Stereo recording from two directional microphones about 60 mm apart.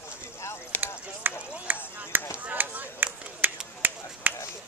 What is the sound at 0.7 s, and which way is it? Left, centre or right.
Run, left.